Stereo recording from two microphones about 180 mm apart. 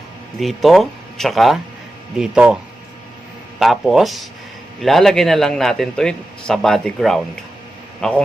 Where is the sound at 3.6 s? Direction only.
Centre (ahead or behind).